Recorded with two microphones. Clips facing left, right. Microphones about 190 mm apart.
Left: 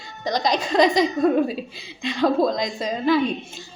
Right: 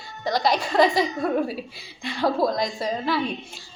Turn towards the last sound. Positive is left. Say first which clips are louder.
# left 5 dB
turn(degrees=20)  # may be behind; listen again after turning